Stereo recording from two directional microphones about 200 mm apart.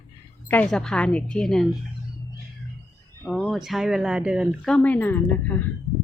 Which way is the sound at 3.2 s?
Centre (ahead or behind).